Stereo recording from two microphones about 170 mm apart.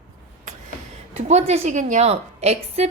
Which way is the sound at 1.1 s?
40° right (ahead or behind).